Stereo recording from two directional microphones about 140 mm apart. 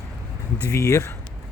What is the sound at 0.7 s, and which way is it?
Speech, 20° left (ahead or behind).